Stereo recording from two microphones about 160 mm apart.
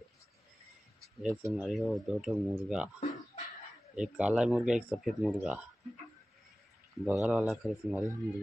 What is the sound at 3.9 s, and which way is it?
Speech, 5° right (ahead or behind).